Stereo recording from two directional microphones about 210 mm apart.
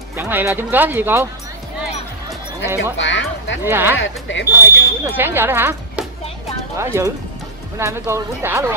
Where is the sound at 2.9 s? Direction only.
60° left (ahead or behind).